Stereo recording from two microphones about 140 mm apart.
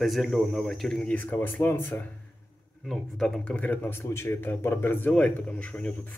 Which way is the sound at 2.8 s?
Centre (ahead or behind).